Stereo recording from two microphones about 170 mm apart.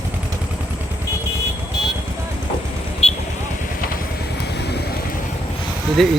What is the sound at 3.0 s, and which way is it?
Vehicle, 35° left (ahead or behind).